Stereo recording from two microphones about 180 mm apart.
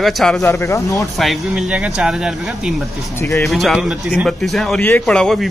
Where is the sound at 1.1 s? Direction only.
Centre (ahead or behind).